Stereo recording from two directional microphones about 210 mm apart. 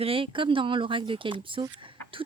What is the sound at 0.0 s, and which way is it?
Speech, 25° right (ahead or behind).